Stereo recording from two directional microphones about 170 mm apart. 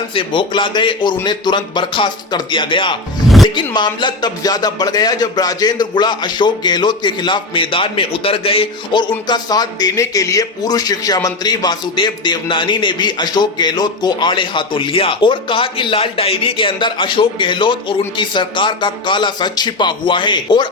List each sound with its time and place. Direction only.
0.1 s a man's voice: 30° left (ahead or behind)